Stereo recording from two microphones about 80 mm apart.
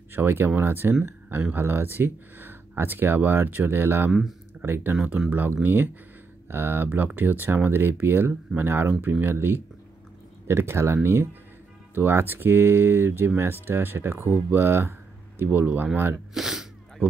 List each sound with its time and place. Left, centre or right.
0.1 s speech: right
4.1 s speech: centre
4.6 s speech: right
16.3 s speech: centre